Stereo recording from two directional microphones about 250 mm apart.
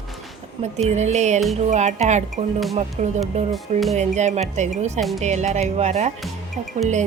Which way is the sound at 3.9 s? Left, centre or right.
Right.